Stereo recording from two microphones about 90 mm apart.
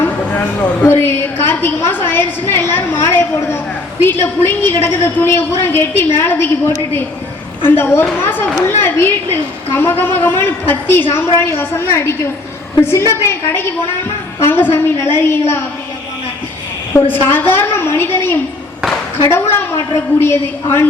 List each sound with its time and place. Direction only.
0.0 s a woman's voice: 20° left (ahead or behind)
17.2 s a woman's voice: 25° left (ahead or behind)